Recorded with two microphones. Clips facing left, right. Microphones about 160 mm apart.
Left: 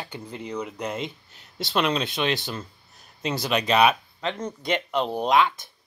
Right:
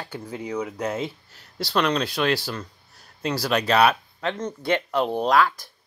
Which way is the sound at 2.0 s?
20° left (ahead or behind).